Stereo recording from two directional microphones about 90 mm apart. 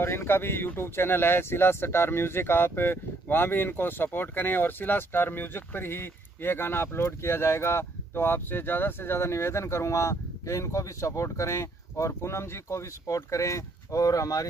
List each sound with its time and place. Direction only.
0.0 s speech: 30° left (ahead or behind)